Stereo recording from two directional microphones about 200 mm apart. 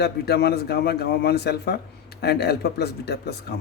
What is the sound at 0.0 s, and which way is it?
Speech, 55° left (ahead or behind).